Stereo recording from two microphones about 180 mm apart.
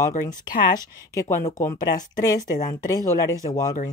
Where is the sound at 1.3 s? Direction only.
45° left (ahead or behind).